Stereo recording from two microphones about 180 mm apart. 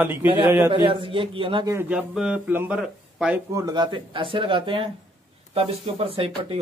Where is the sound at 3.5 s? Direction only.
20° right (ahead or behind).